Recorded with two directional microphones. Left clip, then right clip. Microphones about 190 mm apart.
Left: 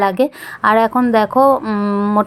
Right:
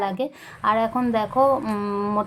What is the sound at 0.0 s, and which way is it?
A woman's voice, 35° left (ahead or behind).